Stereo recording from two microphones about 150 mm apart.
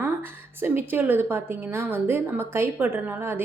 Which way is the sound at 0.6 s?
15° right (ahead or behind).